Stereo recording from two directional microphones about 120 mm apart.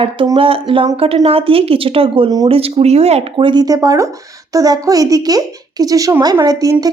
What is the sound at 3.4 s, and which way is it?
Speech, 40° right (ahead or behind).